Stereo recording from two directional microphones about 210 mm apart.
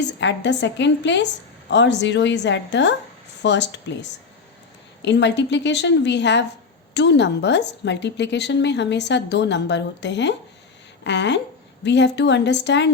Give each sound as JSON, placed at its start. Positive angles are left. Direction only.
{"t": 0.0, "sound": "a woman's voice", "side_deg": 55}
{"t": 5.0, "sound": "a woman's voice", "side_deg": 55}